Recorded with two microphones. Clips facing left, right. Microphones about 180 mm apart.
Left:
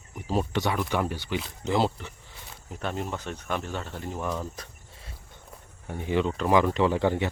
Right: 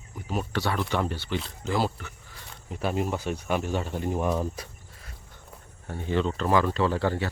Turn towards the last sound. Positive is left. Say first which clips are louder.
# left 2 dB
turn(degrees=15)  # may be behind; listen again after turning